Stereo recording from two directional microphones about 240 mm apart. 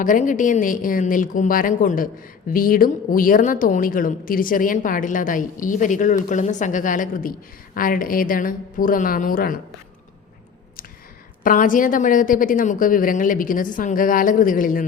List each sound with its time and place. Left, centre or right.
0.0 s a woman's voice: left
11.4 s a woman's voice: left